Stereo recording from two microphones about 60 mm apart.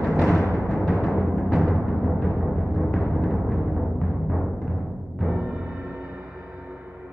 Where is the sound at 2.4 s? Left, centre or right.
Centre.